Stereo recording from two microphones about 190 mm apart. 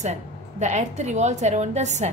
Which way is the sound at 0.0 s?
35° right (ahead or behind).